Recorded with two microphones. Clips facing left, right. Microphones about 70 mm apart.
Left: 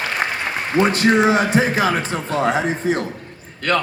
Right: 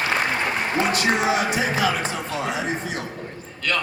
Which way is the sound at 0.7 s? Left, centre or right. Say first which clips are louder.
Left 8 dB; left.